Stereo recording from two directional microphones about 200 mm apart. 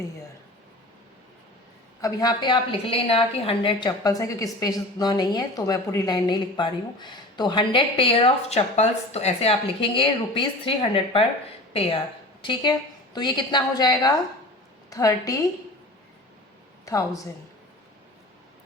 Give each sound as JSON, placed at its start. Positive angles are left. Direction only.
{"t": 2.0, "sound": "a woman's voice", "side_deg": 20}
{"t": 16.8, "sound": "a woman's voice", "side_deg": 15}